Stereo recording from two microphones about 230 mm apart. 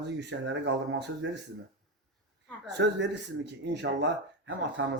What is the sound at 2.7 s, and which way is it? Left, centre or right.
Speech, right.